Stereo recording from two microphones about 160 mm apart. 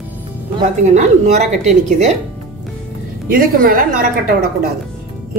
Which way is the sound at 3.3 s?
65° right (ahead or behind).